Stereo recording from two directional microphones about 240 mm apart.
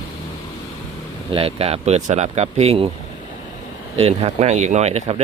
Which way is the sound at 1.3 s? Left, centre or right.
Right.